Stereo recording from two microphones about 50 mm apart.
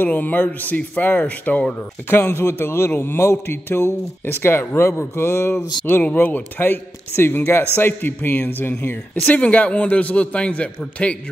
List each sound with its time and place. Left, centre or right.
0.0 s speech: left
2.0 s speech: left
2.9 s a man's voice: left
9.3 s a man's voice: left